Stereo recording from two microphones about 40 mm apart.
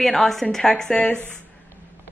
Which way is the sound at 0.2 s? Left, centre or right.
Centre.